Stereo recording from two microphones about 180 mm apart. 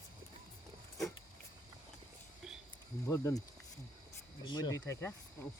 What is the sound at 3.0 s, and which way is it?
Speech, 15° left (ahead or behind).